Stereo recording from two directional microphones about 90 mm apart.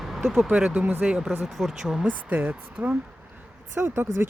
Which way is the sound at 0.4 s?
15° right (ahead or behind).